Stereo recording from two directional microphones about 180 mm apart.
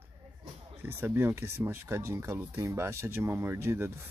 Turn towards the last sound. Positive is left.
turn(degrees=-15)  # may be behind; listen again after turning